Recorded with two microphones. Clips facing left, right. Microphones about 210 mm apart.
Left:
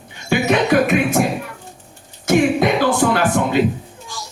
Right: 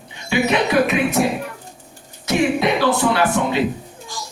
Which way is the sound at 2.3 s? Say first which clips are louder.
Left 3 dB; 50° left (ahead or behind).